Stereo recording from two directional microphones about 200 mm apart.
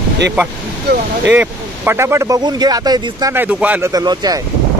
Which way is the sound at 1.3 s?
10° right (ahead or behind).